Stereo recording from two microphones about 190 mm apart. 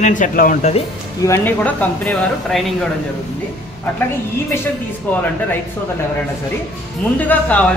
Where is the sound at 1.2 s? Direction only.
10° left (ahead or behind).